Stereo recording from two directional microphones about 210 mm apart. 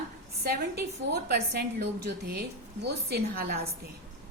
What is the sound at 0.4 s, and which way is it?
A woman's voice, 50° right (ahead or behind).